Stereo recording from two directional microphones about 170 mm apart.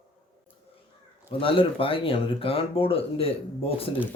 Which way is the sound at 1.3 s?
30° left (ahead or behind).